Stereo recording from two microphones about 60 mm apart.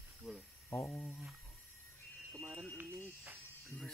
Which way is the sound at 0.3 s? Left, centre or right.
Centre.